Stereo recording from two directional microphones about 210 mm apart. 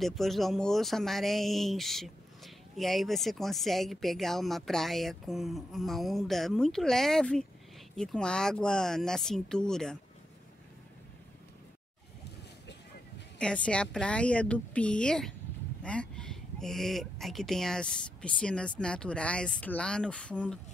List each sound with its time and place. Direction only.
0.0 s speech: centre (ahead or behind)
13.4 s speech: 5° left (ahead or behind)